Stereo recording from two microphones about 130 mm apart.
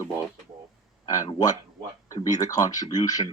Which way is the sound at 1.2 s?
35° left (ahead or behind).